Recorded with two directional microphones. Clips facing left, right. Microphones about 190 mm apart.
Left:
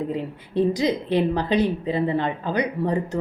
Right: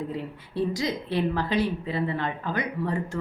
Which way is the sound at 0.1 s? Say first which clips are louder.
Left 6 dB; 20° left (ahead or behind).